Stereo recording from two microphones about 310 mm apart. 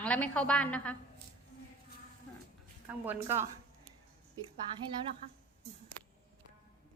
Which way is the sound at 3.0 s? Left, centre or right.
Centre.